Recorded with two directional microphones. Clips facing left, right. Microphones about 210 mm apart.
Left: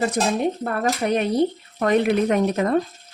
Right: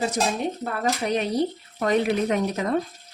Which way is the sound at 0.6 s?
55° left (ahead or behind).